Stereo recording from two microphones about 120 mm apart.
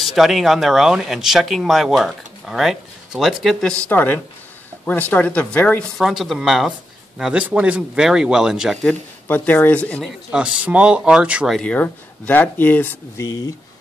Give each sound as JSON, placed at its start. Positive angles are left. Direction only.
{"t": 0.0, "sound": "speech", "side_deg": 0}
{"t": 3.7, "sound": "speech", "side_deg": 15}
{"t": 5.9, "sound": "speech", "side_deg": 0}
{"t": 8.8, "sound": "speech", "side_deg": 15}
{"t": 10.3, "sound": "speech", "side_deg": -10}
{"t": 11.5, "sound": "speech", "side_deg": 10}